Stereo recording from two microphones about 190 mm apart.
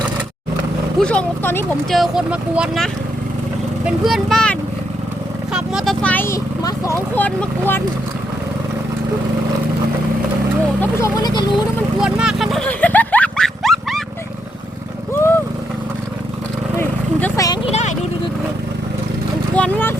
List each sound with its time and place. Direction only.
0.9 s speech: 5° left (ahead or behind)
2.0 s speech: 5° right (ahead or behind)
5.5 s speech: centre (ahead or behind)
10.8 s speech: 20° left (ahead or behind)
11.9 s a sound: 5° right (ahead or behind)
16.7 s a sound: 10° left (ahead or behind)
17.7 s speech: 35° left (ahead or behind)
19.5 s speech: 5° left (ahead or behind)